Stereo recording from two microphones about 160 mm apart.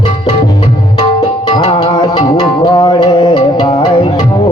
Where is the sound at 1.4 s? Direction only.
30° left (ahead or behind).